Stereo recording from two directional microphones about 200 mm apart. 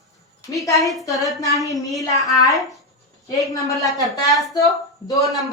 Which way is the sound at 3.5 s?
15° left (ahead or behind).